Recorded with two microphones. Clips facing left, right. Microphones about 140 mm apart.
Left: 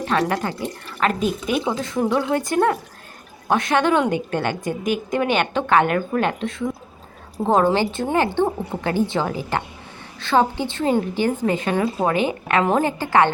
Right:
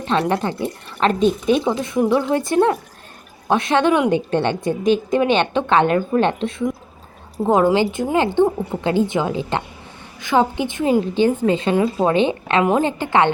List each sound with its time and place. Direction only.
0.0 s a woman's voice: 25° right (ahead or behind)